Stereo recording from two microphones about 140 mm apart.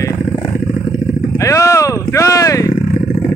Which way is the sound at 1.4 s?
20° left (ahead or behind).